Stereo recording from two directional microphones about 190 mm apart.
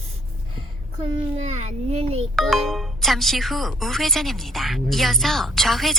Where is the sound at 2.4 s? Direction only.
Centre (ahead or behind).